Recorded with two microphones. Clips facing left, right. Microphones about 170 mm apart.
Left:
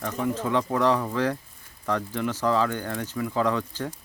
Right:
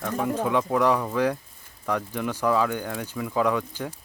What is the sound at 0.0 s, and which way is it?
Speech, 10° right (ahead or behind).